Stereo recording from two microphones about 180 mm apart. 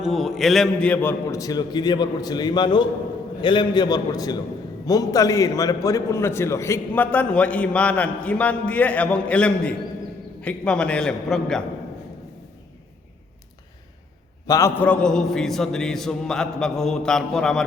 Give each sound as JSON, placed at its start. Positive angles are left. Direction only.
{"t": 0.0, "sound": "a man's voice", "side_deg": 0}
{"t": 14.4, "sound": "a man's voice", "side_deg": 20}
{"t": 14.8, "sound": "a man's voice", "side_deg": 5}